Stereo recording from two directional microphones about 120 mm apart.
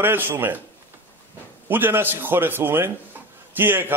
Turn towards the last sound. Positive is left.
turn(degrees=-20)  # may be behind; listen again after turning